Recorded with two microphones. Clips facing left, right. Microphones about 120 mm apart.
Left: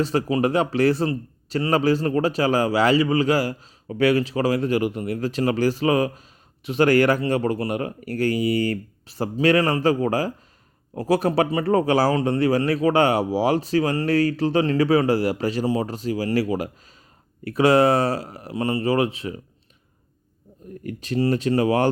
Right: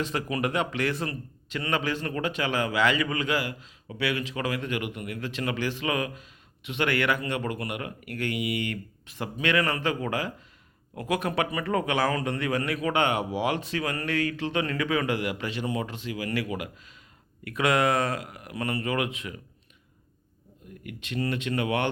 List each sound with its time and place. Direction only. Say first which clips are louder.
0.0 s speech: left 8 dB; 35° left (ahead or behind)
20.8 s speech: left 8 dB; 35° left (ahead or behind)